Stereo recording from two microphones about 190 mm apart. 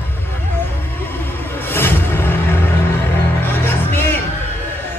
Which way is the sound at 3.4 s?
10° left (ahead or behind).